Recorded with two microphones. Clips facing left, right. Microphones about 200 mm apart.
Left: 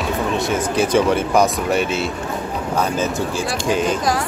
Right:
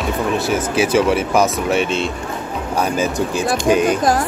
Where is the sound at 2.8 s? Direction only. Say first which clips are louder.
Right 2 dB; 15° right (ahead or behind).